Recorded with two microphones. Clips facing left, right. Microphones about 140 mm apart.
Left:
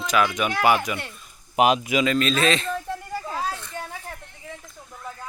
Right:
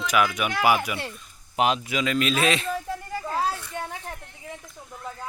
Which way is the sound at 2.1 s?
10° right (ahead or behind).